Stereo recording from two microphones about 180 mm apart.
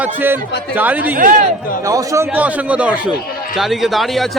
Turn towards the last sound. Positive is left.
turn(degrees=0)  # may be behind; listen again after turning